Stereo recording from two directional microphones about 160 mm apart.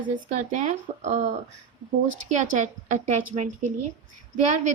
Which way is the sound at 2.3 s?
50° right (ahead or behind).